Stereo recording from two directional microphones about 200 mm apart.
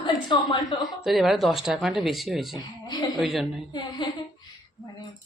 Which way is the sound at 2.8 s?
20° left (ahead or behind).